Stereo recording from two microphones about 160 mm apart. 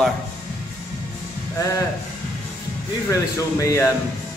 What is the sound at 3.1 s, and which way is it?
Speech, 20° left (ahead or behind).